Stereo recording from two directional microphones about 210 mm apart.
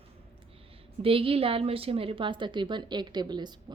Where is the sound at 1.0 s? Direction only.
25° right (ahead or behind).